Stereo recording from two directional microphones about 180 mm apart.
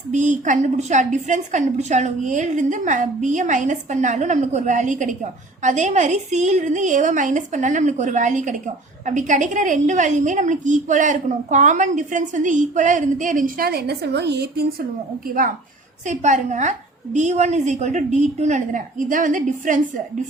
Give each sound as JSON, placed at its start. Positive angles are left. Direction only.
{"t": 0.1, "sound": "a woman's voice", "side_deg": -45}
{"t": 16.0, "sound": "a woman's voice", "side_deg": -45}